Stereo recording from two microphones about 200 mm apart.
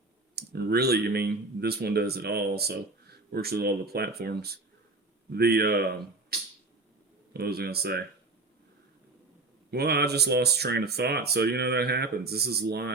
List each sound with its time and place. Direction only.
0.3 s speech: 50° right (ahead or behind)
9.7 s speech: 55° right (ahead or behind)